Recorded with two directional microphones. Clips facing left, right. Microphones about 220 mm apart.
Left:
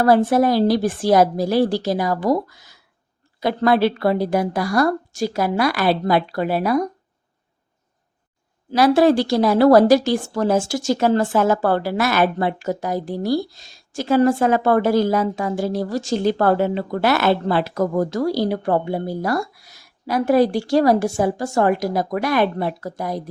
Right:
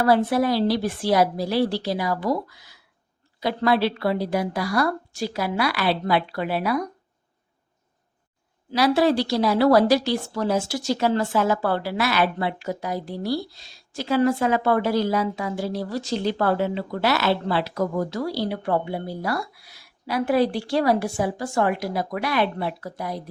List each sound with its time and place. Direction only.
0.0 s a woman's voice: 45° left (ahead or behind)
8.7 s a woman's voice: 50° left (ahead or behind)